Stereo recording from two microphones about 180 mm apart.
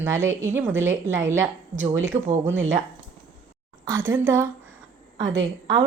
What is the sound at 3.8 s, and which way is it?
Speech, 15° right (ahead or behind).